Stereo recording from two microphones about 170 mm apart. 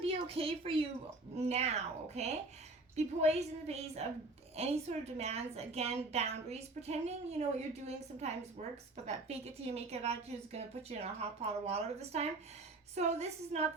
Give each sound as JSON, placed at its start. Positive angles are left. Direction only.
{"t": 0.0, "sound": "a woman's voice", "side_deg": -35}